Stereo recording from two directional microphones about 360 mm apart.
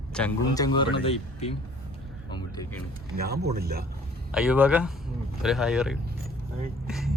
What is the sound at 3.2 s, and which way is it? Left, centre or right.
Speech, right.